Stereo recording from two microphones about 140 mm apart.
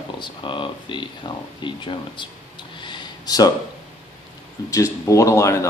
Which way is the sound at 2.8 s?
35° left (ahead or behind).